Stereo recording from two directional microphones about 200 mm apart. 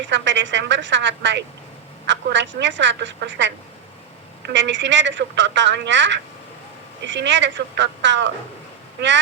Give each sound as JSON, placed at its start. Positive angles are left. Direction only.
{"t": 0.0, "sound": "a woman's voice", "side_deg": -65}